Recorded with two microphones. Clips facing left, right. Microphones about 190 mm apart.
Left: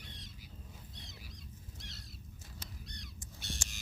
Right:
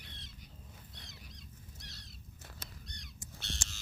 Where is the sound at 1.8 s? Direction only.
25° left (ahead or behind).